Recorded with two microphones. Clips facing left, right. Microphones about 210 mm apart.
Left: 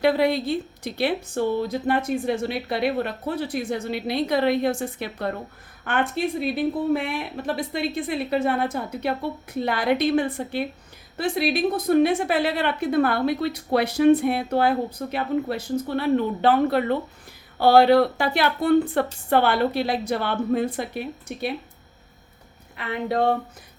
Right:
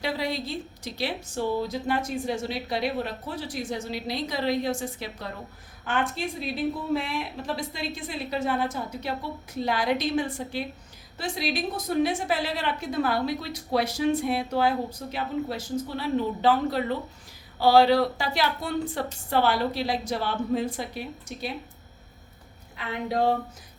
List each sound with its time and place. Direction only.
0.0 s a woman's voice: 60° left (ahead or behind)
22.7 s a woman's voice: 60° left (ahead or behind)